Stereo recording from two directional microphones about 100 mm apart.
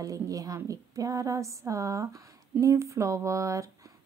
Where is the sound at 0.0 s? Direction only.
35° right (ahead or behind).